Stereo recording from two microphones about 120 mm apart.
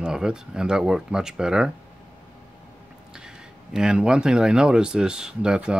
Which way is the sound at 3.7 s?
5° right (ahead or behind).